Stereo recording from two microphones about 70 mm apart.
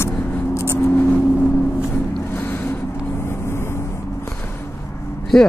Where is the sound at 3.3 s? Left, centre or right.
Left.